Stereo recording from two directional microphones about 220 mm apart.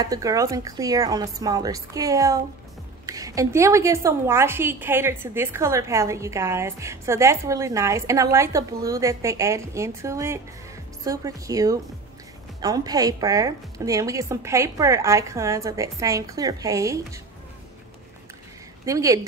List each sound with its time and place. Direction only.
0.0 s a woman's voice: 15° right (ahead or behind)
18.9 s a woman's voice: 15° right (ahead or behind)